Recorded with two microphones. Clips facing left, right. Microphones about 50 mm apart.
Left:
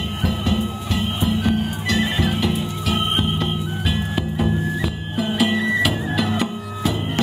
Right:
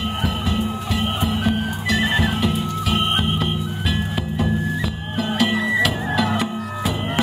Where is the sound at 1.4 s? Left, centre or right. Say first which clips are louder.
Even; centre.